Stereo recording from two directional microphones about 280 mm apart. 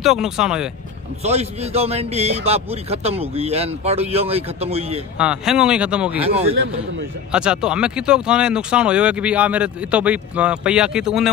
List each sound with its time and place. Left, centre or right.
0.0 s speech: centre
1.2 s a man's voice: right
5.1 s speech: centre
6.2 s a man's voice: right
7.3 s speech: centre